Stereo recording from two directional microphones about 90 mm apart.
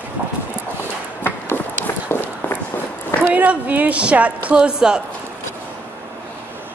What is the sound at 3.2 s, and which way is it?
A woman's voice, 20° right (ahead or behind).